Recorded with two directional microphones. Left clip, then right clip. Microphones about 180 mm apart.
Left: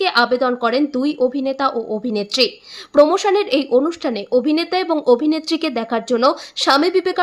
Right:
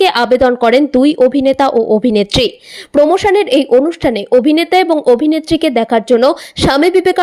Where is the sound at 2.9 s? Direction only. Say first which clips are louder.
Right 4 dB; 25° right (ahead or behind).